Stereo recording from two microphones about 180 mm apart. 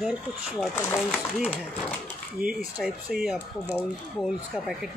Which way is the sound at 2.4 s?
10° right (ahead or behind).